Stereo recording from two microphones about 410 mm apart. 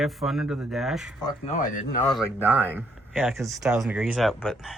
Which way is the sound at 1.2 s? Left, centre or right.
Centre.